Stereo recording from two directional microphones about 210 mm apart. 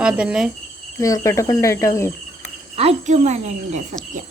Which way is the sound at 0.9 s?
15° left (ahead or behind).